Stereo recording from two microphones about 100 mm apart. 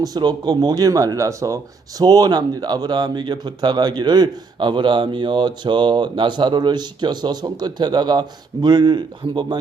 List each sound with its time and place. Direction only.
0.0 s speech: 40° right (ahead or behind)